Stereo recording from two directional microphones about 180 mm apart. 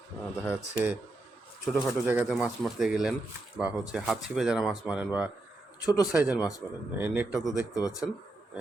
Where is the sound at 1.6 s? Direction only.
Centre (ahead or behind).